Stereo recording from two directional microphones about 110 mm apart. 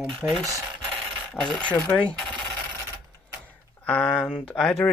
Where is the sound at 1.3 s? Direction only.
10° left (ahead or behind).